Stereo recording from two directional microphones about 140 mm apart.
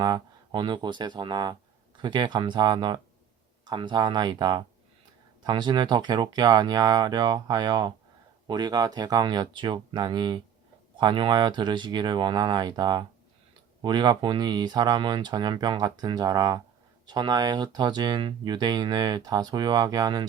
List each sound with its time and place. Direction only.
0.0 s speech: 30° right (ahead or behind)